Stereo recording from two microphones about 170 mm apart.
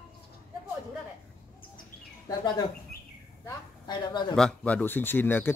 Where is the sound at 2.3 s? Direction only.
25° left (ahead or behind).